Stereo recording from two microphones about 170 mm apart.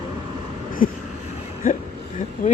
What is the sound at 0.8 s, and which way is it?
Vehicle, 55° left (ahead or behind).